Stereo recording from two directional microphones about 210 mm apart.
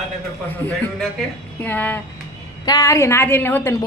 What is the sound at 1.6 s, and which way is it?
A woman's voice, 10° left (ahead or behind).